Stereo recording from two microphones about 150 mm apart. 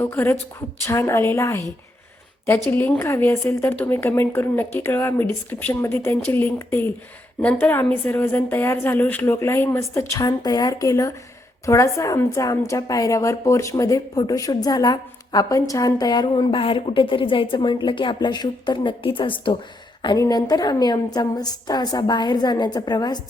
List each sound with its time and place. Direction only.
0.0 s a woman's voice: 15° left (ahead or behind)
2.6 s a woman's voice: 10° left (ahead or behind); by 23.2 s 30° left (ahead or behind)